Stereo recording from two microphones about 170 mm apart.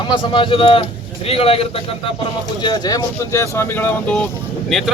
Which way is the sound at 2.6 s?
25° left (ahead or behind).